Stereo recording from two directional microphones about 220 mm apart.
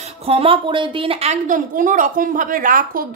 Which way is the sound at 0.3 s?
25° right (ahead or behind).